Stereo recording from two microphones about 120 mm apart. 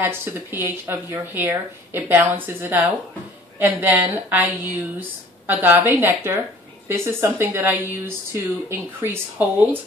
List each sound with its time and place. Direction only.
0.0 s speech: 20° right (ahead or behind)